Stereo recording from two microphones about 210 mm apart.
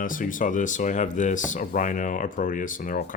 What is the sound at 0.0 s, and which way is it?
Speech, 40° left (ahead or behind).